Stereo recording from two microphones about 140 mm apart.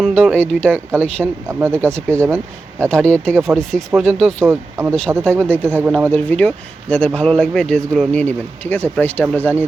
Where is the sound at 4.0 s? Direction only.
Centre (ahead or behind).